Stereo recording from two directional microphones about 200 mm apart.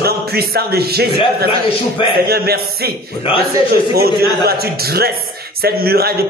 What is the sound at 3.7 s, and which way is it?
Speech, 50° right (ahead or behind).